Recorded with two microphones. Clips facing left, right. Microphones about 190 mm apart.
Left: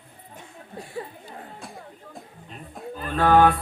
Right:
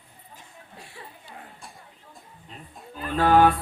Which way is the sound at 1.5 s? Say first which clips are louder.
Left 7 dB; 75° left (ahead or behind).